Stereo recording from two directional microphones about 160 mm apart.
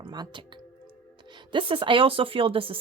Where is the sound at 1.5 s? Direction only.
30° right (ahead or behind).